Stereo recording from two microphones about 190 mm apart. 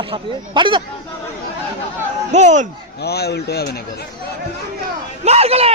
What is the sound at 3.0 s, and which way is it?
Speech, 60° left (ahead or behind).